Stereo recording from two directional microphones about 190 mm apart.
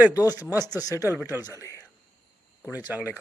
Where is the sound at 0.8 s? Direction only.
15° left (ahead or behind).